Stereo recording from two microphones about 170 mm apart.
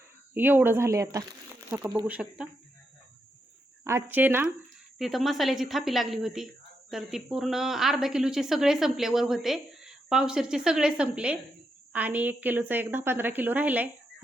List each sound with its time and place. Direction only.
0.3 s a woman's voice: 10° right (ahead or behind)
2.0 s a woman's voice: 5° right (ahead or behind)
3.8 s a woman's voice: 15° right (ahead or behind)
4.9 s a woman's voice: centre (ahead or behind)